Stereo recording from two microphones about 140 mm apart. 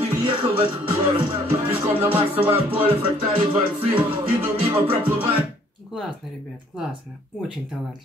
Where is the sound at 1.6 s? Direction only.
15° right (ahead or behind).